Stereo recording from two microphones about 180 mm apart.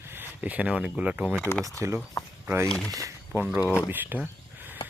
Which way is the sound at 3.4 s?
5° right (ahead or behind).